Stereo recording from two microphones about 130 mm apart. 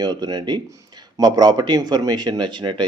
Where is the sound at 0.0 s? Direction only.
35° right (ahead or behind).